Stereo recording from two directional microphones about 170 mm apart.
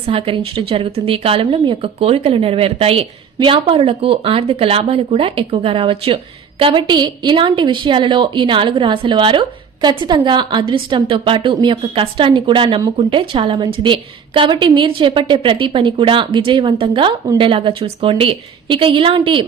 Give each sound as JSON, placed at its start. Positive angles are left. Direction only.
{"t": 0.0, "sound": "a woman's voice", "side_deg": -35}